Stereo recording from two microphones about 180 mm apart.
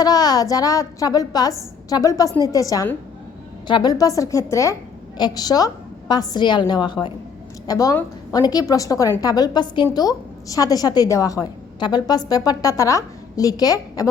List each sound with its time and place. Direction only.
0.0 s a woman's voice: 20° left (ahead or behind)